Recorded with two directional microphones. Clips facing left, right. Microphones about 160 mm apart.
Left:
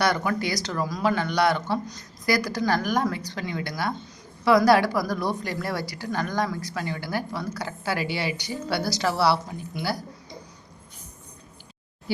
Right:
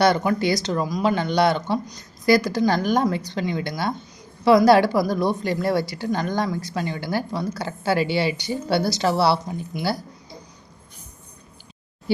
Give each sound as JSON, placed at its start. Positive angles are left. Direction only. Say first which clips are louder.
{"t": 0.0, "sound": "a woman's voice", "louder": "right 5 dB", "side_deg": -25}